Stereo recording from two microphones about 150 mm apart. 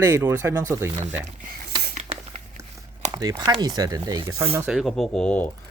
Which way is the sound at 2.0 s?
50° right (ahead or behind).